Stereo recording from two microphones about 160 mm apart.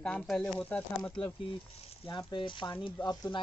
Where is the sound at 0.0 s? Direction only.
5° left (ahead or behind).